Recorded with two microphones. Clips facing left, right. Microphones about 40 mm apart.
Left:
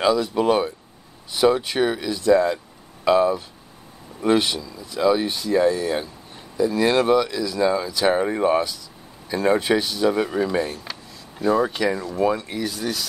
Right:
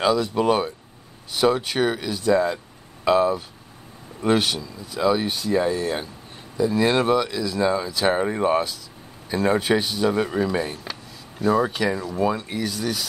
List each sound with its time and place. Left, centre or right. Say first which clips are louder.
0.0 s speech: left 1 dB; centre
4.6 s speech: left 1 dB; centre
4.9 s speech: left 2 dB; centre